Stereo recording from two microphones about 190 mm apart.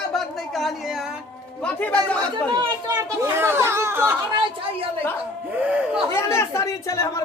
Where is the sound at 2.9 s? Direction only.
15° right (ahead or behind).